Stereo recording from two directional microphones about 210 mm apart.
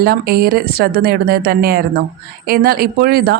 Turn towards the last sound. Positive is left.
turn(degrees=-50)  # may be behind; listen again after turning